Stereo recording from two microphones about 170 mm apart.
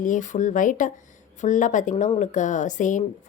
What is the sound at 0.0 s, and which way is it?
A woman's voice, 50° left (ahead or behind).